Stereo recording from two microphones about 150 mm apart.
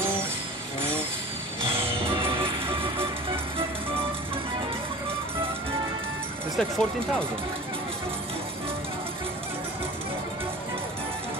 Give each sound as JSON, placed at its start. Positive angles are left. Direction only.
{"t": 2.3, "sound": "music", "side_deg": -35}
{"t": 6.5, "sound": "speech", "side_deg": 5}